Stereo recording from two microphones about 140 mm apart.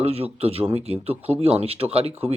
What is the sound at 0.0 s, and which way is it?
Speech, 45° right (ahead or behind).